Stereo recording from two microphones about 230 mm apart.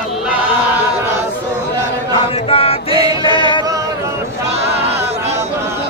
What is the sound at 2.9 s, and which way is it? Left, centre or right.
Music, centre.